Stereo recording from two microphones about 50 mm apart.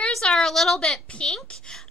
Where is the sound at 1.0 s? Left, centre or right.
Left.